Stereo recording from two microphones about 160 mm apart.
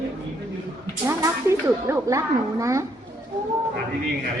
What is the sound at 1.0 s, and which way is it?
Speech, 15° right (ahead or behind).